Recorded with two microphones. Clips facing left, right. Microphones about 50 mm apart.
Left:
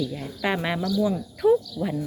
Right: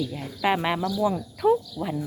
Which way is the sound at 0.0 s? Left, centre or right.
Centre.